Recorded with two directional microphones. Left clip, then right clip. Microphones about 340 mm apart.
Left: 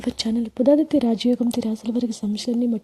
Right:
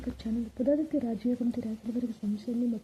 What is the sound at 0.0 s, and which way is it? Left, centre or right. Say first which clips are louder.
Speech: left 11 dB; left.